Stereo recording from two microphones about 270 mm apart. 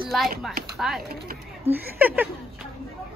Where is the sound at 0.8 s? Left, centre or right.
Centre.